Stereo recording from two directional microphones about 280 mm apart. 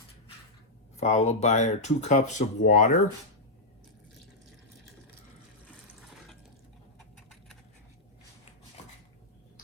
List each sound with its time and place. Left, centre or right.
0.9 s speech: left